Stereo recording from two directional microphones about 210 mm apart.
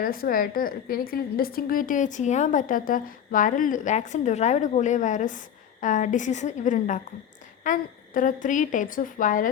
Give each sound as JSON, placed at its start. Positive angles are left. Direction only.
{"t": 0.0, "sound": "a woman's voice", "side_deg": 45}